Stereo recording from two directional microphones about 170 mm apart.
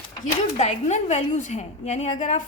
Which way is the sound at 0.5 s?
40° left (ahead or behind).